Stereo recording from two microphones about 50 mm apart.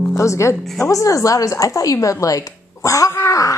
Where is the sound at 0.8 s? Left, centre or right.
Left.